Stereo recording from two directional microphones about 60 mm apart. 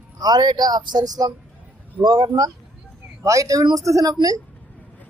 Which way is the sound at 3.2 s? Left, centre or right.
Right.